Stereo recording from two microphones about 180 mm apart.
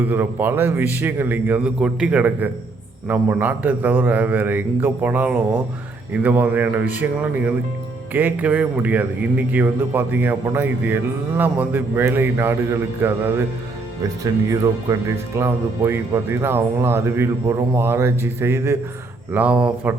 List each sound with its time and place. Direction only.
0.0 s a man's voice: 10° right (ahead or behind)
14.5 s a man's voice: 15° right (ahead or behind)